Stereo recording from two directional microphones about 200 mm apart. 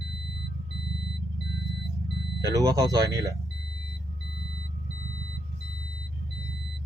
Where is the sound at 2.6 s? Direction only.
20° right (ahead or behind).